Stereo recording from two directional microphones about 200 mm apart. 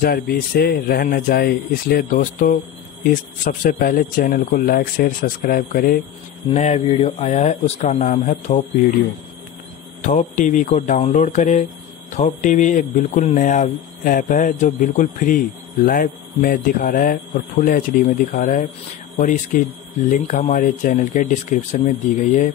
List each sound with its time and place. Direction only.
0.0 s speech: 50° left (ahead or behind)
3.6 s speech: 45° left (ahead or behind)
6.5 s speech: 30° left (ahead or behind)
10.0 s speech: 35° left (ahead or behind)